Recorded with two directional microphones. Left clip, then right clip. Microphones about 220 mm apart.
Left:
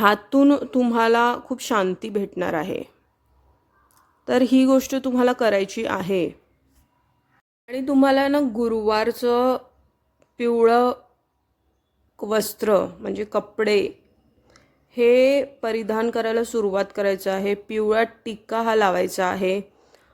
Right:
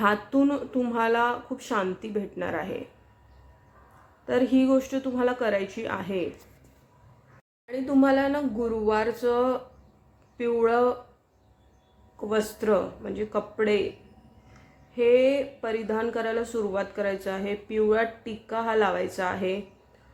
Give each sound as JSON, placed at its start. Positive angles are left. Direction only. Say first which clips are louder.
{"t": 0.0, "sound": "speech", "louder": "left 6 dB", "side_deg": 45}
{"t": 4.3, "sound": "speech", "louder": "left 5 dB", "side_deg": 50}
{"t": 7.7, "sound": "speech", "louder": "left 4 dB", "side_deg": 40}
{"t": 12.1, "sound": "speech", "louder": "left 4 dB", "side_deg": 45}